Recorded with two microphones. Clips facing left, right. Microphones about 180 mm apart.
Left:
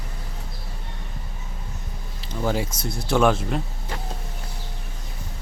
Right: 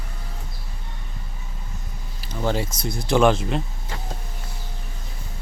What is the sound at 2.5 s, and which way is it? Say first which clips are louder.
Speech: right 1 dB; 10° left (ahead or behind).